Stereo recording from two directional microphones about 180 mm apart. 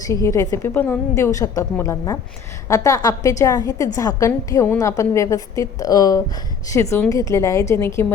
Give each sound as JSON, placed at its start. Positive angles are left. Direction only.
{"t": 0.1, "sound": "a woman's voice", "side_deg": 15}